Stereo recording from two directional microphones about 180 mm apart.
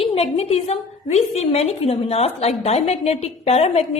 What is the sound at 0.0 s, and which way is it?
A woman's voice, 35° left (ahead or behind).